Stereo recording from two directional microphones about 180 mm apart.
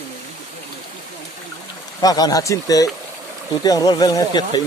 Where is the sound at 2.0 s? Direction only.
20° left (ahead or behind).